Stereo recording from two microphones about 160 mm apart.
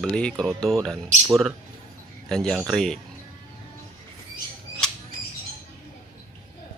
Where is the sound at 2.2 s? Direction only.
5° left (ahead or behind).